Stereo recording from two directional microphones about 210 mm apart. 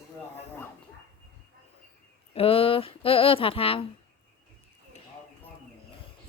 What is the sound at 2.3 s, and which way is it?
Speech, 25° left (ahead or behind).